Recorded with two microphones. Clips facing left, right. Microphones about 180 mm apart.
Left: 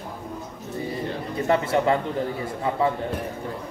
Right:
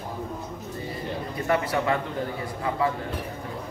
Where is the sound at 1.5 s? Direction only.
25° left (ahead or behind).